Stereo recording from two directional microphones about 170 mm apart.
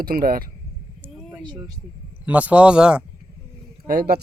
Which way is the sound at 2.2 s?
10° right (ahead or behind).